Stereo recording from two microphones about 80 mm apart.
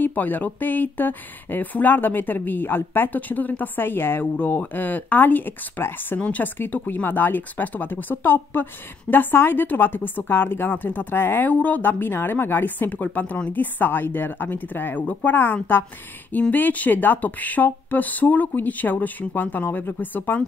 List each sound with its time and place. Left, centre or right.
0.0 s speech: left